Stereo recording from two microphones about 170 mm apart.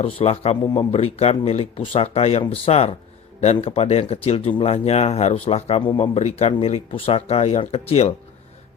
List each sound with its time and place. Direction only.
0.0 s speech: 35° left (ahead or behind)